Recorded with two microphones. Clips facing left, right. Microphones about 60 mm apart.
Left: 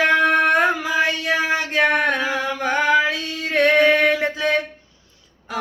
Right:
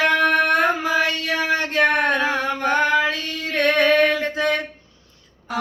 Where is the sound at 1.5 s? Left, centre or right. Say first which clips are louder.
Right 3 dB; right.